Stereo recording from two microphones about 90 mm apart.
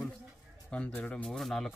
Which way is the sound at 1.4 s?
Centre (ahead or behind).